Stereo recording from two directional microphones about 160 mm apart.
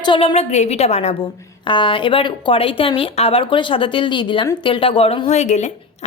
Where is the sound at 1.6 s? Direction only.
30° left (ahead or behind).